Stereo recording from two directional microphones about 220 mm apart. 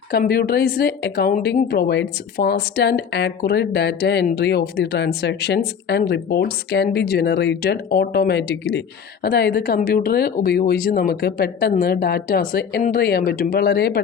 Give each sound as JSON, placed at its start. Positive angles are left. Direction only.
{"t": 0.1, "sound": "a woman's voice", "side_deg": 45}